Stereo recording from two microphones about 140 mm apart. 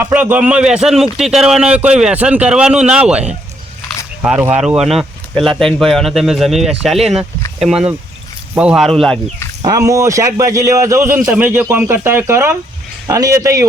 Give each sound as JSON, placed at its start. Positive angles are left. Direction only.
{"t": 0.0, "sound": "speech", "side_deg": -10}
{"t": 4.6, "sound": "speech", "side_deg": -5}
{"t": 9.6, "sound": "a man's voice", "side_deg": -25}